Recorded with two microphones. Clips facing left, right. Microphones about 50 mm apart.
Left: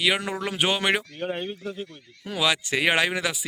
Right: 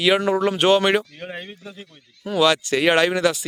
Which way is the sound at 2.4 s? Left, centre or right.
Centre.